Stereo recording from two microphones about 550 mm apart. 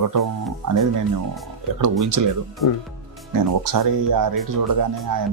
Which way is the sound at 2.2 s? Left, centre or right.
Right.